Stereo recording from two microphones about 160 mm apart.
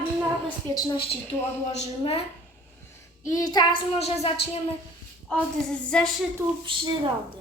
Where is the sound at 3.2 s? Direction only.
25° left (ahead or behind).